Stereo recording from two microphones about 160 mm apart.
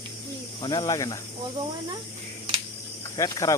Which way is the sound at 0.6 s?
25° left (ahead or behind).